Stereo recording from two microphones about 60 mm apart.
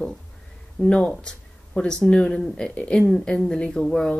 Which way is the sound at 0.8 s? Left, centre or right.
Left.